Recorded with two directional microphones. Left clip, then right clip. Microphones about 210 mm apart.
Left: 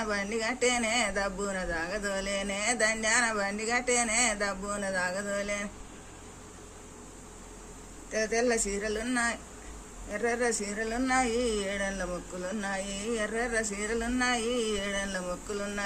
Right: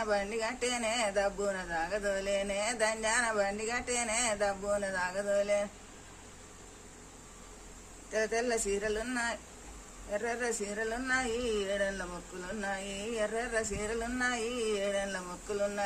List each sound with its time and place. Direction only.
0.0 s speech: 15° right (ahead or behind)
8.1 s speech: 20° right (ahead or behind)